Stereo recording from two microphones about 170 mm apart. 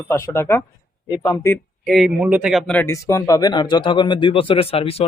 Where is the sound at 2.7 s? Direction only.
15° left (ahead or behind).